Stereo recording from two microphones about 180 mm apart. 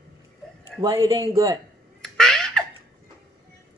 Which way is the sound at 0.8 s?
25° right (ahead or behind).